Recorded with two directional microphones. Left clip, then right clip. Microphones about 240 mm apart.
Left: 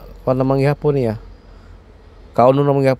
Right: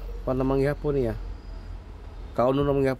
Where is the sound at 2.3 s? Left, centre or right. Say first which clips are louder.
Left 10 dB; left.